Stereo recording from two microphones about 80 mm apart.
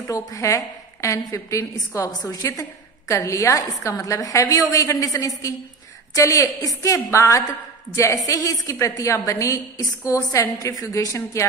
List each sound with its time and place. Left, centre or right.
0.0 s a woman's voice: left